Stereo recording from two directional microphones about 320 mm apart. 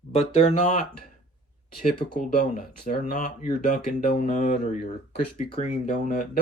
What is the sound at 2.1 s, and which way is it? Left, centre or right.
Speech, left.